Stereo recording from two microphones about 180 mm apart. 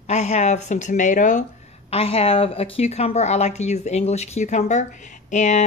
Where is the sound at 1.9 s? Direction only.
30° left (ahead or behind).